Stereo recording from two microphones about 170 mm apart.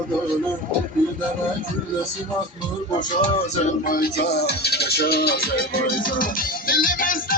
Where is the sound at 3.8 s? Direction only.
60° left (ahead or behind).